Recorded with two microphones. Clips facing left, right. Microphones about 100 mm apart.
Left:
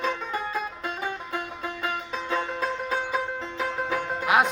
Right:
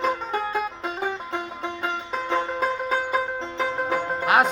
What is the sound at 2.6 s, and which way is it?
Music, 55° right (ahead or behind).